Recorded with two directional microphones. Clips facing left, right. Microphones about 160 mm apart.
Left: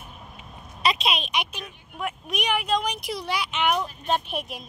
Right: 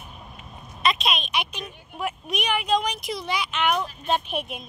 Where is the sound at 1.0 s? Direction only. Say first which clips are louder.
Even; 15° left (ahead or behind).